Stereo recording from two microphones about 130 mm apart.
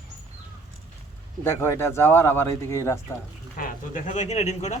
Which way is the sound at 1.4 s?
20° left (ahead or behind).